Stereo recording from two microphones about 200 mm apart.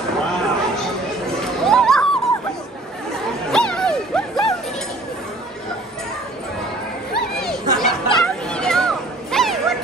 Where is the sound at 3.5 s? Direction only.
5° left (ahead or behind).